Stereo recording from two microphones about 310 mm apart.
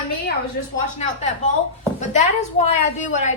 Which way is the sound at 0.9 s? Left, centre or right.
Left.